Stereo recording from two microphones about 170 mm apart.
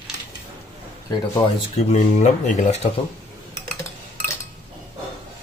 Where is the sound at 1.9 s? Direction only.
45° left (ahead or behind).